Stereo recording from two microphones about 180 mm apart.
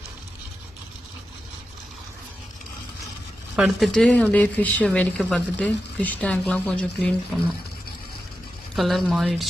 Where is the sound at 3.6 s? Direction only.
Centre (ahead or behind).